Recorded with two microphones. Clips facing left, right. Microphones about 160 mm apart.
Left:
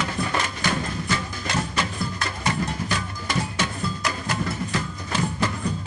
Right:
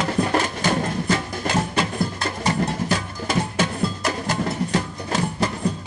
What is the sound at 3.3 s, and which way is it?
Music, 50° right (ahead or behind).